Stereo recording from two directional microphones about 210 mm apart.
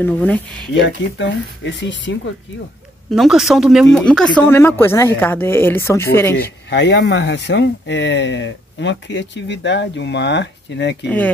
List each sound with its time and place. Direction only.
0.0 s speech: 5° left (ahead or behind)
0.7 s speech: 60° left (ahead or behind)
3.1 s speech: centre (ahead or behind)
6.7 s speech: 55° left (ahead or behind)